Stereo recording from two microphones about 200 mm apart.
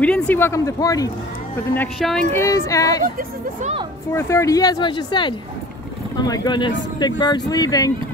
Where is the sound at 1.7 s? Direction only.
5° left (ahead or behind).